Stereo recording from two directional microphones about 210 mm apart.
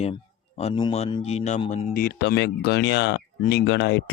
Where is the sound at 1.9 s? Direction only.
45° left (ahead or behind).